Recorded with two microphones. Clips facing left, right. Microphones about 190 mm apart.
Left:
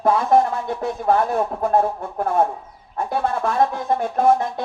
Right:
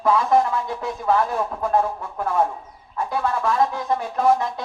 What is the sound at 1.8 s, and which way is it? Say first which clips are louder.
Speech: left 3 dB; 40° left (ahead or behind).